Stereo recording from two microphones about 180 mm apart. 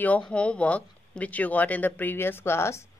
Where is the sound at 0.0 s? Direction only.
5° left (ahead or behind).